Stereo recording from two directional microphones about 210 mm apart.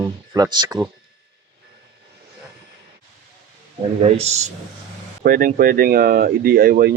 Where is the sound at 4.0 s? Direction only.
30° right (ahead or behind).